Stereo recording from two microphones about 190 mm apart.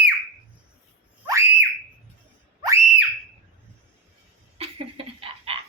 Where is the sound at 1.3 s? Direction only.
10° right (ahead or behind).